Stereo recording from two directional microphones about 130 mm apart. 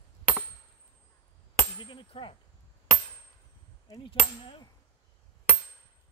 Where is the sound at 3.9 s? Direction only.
40° left (ahead or behind).